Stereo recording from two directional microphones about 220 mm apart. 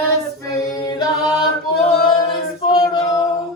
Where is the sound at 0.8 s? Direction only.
20° left (ahead or behind).